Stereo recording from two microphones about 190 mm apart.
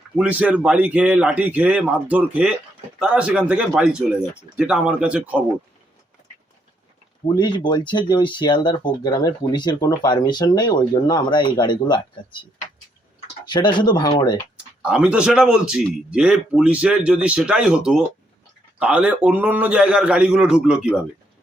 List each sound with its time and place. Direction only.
0.2 s a man's voice: 5° right (ahead or behind)
7.3 s speech: 25° left (ahead or behind)
14.8 s a man's voice: 5° right (ahead or behind)